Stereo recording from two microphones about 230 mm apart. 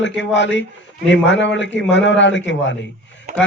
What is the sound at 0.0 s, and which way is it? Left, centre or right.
A man's voice, left.